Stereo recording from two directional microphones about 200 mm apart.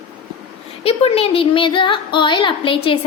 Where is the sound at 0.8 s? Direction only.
30° left (ahead or behind).